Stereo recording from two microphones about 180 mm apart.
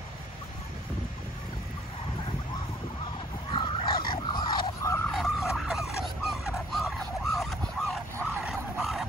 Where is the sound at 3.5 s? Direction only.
30° left (ahead or behind).